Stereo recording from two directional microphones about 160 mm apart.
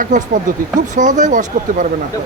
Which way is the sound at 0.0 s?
50° right (ahead or behind).